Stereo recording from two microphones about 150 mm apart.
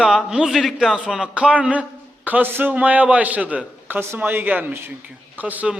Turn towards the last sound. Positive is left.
turn(degrees=-10)  # may be behind; listen again after turning